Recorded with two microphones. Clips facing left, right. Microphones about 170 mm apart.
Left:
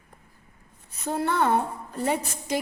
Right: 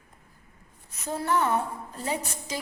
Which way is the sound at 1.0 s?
60° left (ahead or behind).